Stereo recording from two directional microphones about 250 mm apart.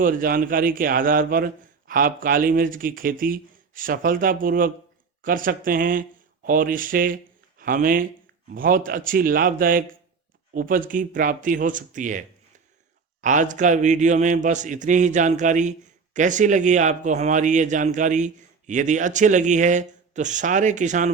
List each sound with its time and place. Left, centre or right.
0.0 s speech: right
13.2 s a man's voice: right